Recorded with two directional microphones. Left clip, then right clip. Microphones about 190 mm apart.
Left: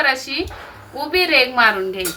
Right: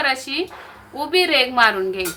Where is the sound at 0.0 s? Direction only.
40° right (ahead or behind).